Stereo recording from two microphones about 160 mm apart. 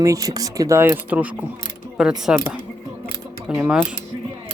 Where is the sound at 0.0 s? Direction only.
20° right (ahead or behind); by 2.1 s 5° right (ahead or behind).